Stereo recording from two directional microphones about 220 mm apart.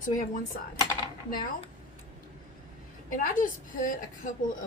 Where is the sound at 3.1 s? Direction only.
40° left (ahead or behind).